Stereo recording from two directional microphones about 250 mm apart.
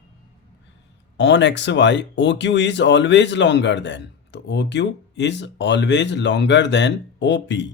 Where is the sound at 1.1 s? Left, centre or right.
Left.